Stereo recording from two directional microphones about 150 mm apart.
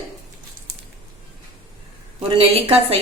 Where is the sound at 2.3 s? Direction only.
40° right (ahead or behind).